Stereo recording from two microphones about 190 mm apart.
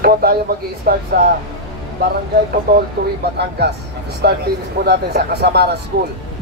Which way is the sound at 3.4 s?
60° right (ahead or behind).